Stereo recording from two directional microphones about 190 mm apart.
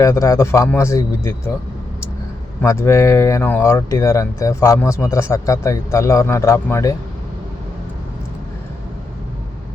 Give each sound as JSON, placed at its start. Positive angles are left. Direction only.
{"t": 0.0, "sound": "speech", "side_deg": 15}
{"t": 2.6, "sound": "speech", "side_deg": 15}